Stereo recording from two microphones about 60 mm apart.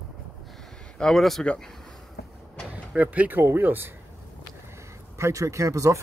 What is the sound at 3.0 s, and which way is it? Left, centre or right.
Speech, right.